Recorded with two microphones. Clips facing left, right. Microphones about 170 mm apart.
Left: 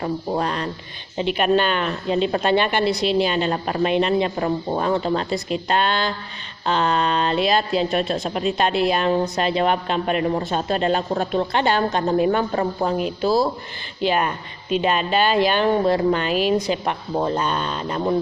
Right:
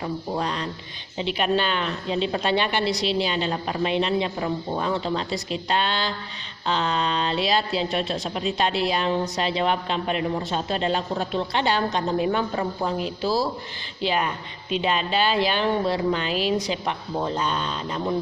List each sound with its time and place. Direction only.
0.0 s speech: 55° left (ahead or behind)